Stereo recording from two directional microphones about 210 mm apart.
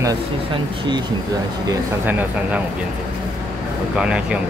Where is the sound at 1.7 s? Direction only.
10° right (ahead or behind).